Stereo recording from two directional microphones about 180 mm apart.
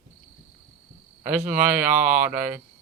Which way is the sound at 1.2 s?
10° right (ahead or behind).